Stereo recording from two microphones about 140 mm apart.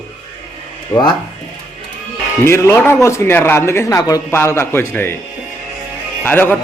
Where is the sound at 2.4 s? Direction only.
20° left (ahead or behind).